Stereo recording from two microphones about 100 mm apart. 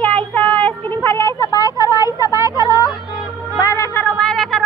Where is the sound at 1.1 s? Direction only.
25° left (ahead or behind).